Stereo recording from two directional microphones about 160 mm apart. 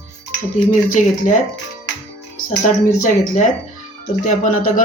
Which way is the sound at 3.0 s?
55° left (ahead or behind).